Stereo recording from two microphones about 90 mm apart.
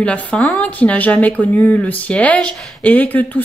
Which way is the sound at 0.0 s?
15° left (ahead or behind).